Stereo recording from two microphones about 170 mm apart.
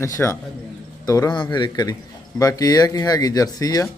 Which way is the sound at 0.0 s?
15° left (ahead or behind).